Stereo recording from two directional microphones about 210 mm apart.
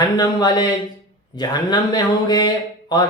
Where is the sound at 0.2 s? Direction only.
20° left (ahead or behind).